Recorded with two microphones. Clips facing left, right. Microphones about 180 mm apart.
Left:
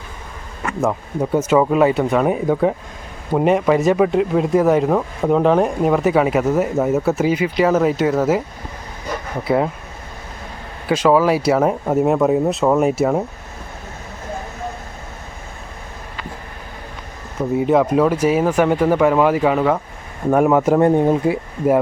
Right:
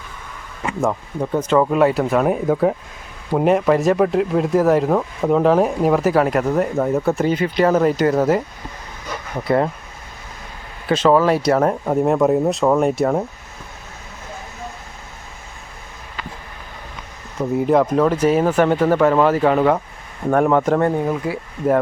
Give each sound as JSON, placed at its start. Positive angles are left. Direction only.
{"t": 0.8, "sound": "speech", "side_deg": 5}
{"t": 9.4, "sound": "speech", "side_deg": 5}
{"t": 10.8, "sound": "speech", "side_deg": 10}
{"t": 17.6, "sound": "speech", "side_deg": 0}
{"t": 20.8, "sound": "speech", "side_deg": 25}